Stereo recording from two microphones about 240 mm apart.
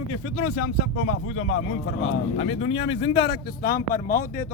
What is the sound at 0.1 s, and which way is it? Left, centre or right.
Speech, left.